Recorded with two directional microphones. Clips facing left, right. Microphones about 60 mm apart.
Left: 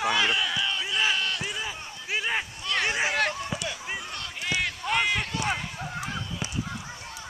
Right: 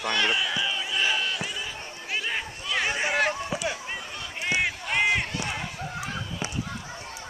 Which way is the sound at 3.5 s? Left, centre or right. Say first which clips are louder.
Right 3 dB; right.